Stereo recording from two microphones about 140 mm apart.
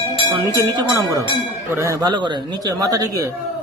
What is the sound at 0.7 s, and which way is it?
Speech, 25° right (ahead or behind).